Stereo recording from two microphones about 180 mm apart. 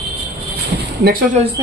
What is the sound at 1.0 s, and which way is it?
Speech, 55° right (ahead or behind).